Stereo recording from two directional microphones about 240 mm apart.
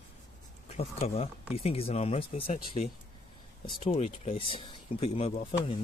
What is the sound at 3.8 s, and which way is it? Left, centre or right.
Speech, left.